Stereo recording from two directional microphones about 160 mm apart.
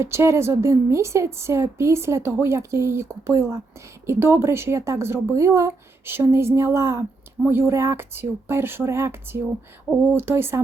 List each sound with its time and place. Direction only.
0.0 s a woman's voice: 15° right (ahead or behind)